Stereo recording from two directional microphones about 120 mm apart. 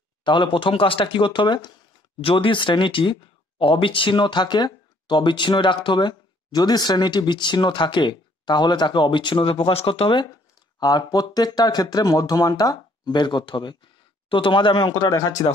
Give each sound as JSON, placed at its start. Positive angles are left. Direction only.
{"t": 0.2, "sound": "speech", "side_deg": 40}
{"t": 10.8, "sound": "speech", "side_deg": 35}